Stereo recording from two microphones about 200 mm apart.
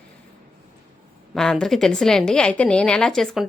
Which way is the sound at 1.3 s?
5° left (ahead or behind).